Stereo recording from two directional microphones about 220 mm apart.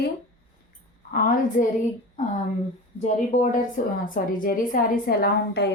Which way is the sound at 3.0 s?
30° left (ahead or behind).